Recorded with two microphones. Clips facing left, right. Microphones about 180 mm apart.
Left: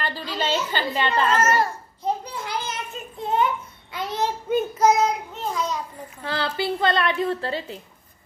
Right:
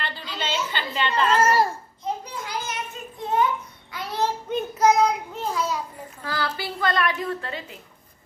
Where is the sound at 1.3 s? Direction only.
35° right (ahead or behind).